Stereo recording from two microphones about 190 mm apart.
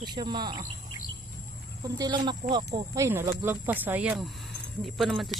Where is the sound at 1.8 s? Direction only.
20° right (ahead or behind); by 5.3 s centre (ahead or behind).